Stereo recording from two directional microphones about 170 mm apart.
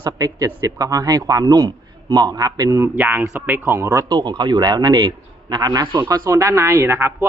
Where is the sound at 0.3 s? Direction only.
20° right (ahead or behind).